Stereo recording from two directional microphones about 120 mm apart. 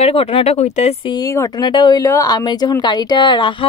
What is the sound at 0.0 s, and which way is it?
Speech, 50° left (ahead or behind).